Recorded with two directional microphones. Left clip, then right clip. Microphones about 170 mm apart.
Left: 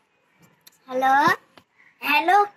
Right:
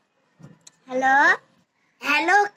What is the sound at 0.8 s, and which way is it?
Speech, centre (ahead or behind).